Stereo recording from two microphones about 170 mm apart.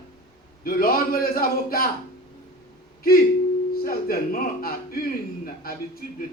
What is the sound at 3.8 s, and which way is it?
A man's voice, 55° left (ahead or behind).